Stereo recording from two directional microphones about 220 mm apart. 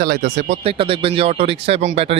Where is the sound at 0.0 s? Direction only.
45° right (ahead or behind).